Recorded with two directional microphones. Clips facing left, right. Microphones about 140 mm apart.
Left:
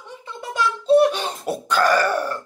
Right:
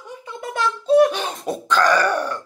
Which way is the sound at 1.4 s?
10° left (ahead or behind).